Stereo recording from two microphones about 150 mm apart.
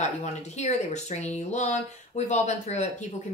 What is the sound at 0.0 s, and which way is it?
A woman's voice, 50° left (ahead or behind).